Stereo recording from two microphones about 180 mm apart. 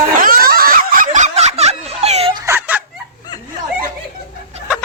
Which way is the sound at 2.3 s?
15° right (ahead or behind).